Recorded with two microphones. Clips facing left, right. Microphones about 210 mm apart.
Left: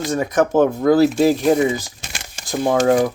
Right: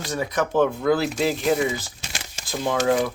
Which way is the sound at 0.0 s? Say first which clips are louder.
Left 7 dB; 45° left (ahead or behind).